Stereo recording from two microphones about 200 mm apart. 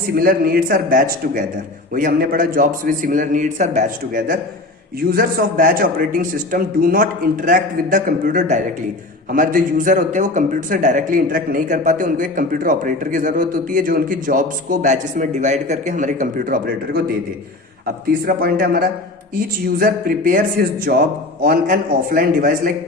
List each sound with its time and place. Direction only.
0.0 s a man's voice: 50° right (ahead or behind)
18.0 s a man's voice: 50° right (ahead or behind)